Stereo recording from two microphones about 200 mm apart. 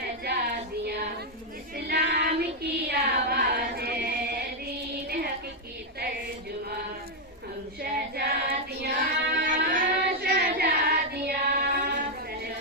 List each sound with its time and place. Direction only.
1.8 s child singing: 55° right (ahead or behind)
7.8 s child singing: 50° right (ahead or behind)